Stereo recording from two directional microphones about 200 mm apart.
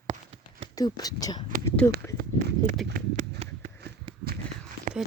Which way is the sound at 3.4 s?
30° right (ahead or behind).